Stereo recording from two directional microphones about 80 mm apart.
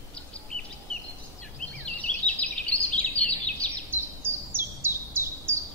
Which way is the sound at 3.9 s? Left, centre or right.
Right.